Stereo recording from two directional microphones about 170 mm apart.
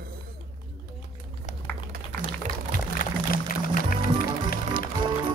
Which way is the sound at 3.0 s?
55° left (ahead or behind).